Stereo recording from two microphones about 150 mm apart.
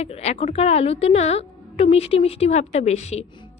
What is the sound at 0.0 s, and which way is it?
A woman's voice, 45° left (ahead or behind).